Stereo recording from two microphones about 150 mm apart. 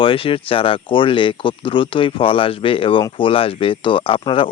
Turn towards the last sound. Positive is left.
turn(degrees=35)  # may be behind; listen again after turning